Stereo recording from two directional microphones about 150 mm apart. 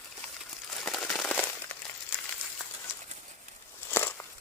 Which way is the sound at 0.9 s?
5° left (ahead or behind).